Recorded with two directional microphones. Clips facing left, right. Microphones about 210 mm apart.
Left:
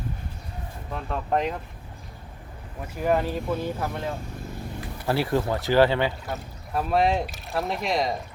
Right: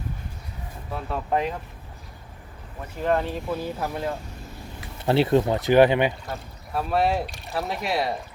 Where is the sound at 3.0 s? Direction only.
5° left (ahead or behind).